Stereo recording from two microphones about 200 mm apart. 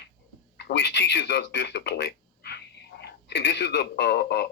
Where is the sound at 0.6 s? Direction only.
60° left (ahead or behind).